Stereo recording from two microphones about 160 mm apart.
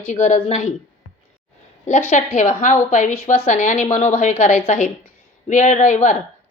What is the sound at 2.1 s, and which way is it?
Speech, 45° left (ahead or behind).